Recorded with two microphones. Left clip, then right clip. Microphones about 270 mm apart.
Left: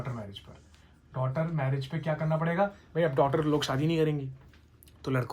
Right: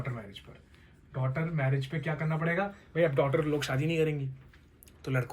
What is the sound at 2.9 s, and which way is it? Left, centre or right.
Speech, centre.